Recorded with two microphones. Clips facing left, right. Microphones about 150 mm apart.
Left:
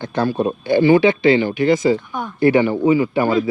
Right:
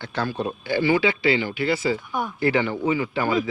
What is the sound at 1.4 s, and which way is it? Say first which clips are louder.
Speech: left 8 dB; 50° left (ahead or behind).